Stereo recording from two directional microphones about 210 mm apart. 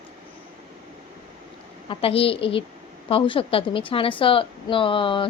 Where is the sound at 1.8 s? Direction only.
25° left (ahead or behind).